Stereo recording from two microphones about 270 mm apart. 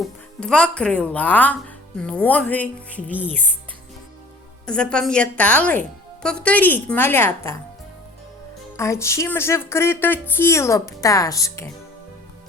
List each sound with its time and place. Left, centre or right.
0.0 s speech: centre
4.6 s speech: centre
8.7 s speech: centre